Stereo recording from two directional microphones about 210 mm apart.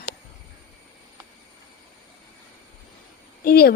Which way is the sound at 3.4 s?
45° left (ahead or behind).